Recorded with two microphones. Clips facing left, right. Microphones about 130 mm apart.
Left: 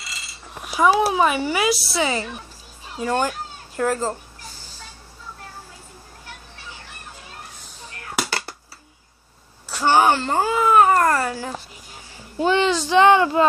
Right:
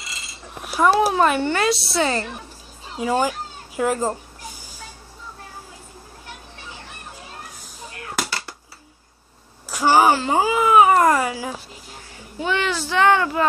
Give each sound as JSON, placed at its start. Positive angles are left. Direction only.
{"t": 0.7, "sound": "a child's voice", "side_deg": 0}
{"t": 9.7, "sound": "a sound", "side_deg": -10}
{"t": 12.4, "sound": "a child's voice", "side_deg": 35}
{"t": 12.6, "sound": "speech", "side_deg": 20}